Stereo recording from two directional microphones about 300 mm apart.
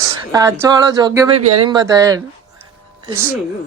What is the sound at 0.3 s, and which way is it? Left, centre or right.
Speech, centre.